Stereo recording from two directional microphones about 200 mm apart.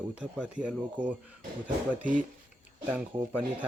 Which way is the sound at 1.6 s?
40° right (ahead or behind).